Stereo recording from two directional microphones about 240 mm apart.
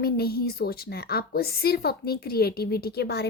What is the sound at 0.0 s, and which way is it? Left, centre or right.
A woman's voice, left.